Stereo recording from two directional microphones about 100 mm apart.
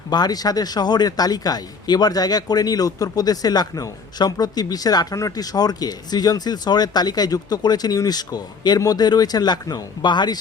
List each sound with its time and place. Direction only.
0.1 s speech: 40° left (ahead or behind)